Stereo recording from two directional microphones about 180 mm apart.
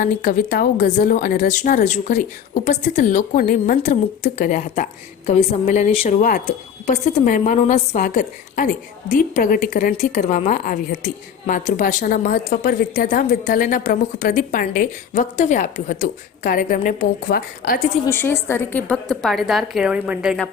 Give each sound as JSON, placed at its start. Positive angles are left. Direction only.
{"t": 0.0, "sound": "a woman's voice", "side_deg": 50}
{"t": 18.0, "sound": "a woman's voice", "side_deg": 10}